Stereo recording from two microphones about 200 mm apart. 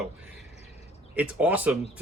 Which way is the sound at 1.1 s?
10° right (ahead or behind).